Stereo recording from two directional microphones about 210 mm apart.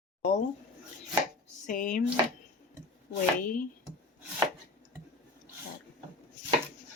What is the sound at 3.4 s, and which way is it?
Speech, 40° left (ahead or behind).